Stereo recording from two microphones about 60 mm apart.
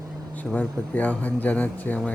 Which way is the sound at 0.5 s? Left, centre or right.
Left.